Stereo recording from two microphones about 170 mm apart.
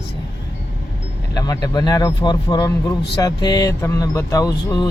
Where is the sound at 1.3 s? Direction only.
20° left (ahead or behind).